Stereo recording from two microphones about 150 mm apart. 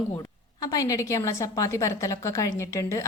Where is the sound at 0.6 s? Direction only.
25° left (ahead or behind).